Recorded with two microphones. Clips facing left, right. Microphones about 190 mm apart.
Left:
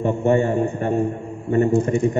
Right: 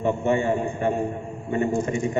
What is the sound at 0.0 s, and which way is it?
A man's voice, 45° left (ahead or behind).